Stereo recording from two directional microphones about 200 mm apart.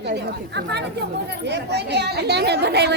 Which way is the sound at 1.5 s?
60° right (ahead or behind).